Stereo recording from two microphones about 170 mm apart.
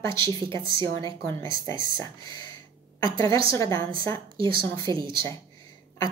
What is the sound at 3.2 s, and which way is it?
Speech, 30° right (ahead or behind).